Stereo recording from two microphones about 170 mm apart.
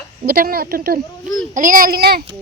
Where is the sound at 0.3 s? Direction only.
60° right (ahead or behind).